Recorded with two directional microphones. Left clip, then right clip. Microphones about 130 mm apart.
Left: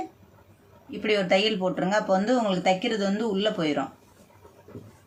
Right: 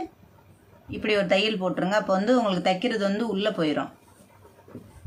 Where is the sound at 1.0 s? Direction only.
30° right (ahead or behind).